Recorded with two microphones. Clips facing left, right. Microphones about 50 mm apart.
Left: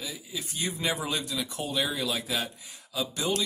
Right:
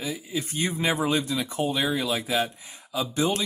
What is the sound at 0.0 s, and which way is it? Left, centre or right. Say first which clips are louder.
Speech: right 7 dB; right.